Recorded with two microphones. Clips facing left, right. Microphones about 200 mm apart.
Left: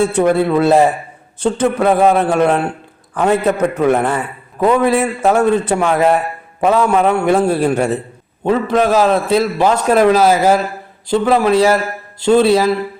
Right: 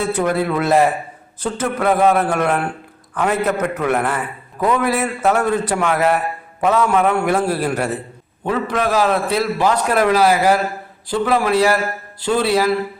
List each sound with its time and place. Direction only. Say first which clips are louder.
0.1 s a man's voice: left 5 dB; 25° left (ahead or behind)